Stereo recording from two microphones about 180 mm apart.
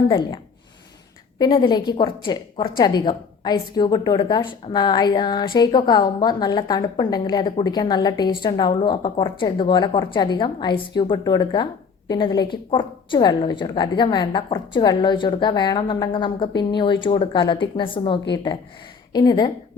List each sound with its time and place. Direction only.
1.4 s a woman's voice: 25° left (ahead or behind)